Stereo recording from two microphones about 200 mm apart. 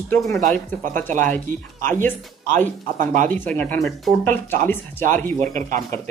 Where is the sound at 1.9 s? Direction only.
10° left (ahead or behind).